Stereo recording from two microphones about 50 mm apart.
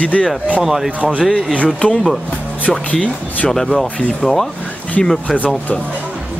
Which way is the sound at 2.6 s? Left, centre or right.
Left.